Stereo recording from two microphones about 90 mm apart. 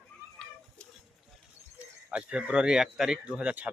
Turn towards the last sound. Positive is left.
turn(degrees=-15)  # may be behind; listen again after turning